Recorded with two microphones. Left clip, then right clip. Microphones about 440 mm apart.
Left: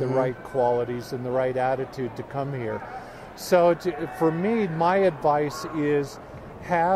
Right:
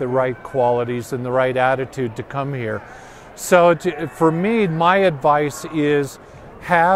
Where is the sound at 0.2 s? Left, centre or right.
Right.